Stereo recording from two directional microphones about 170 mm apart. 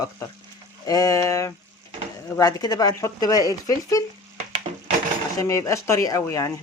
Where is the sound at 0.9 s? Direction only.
20° left (ahead or behind).